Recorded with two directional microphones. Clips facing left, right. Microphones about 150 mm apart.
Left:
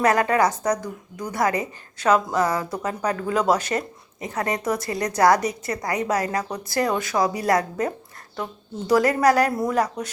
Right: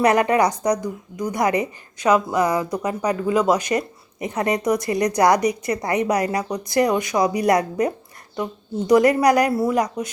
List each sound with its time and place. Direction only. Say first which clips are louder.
0.0 s speech: right 2 dB; 20° right (ahead or behind)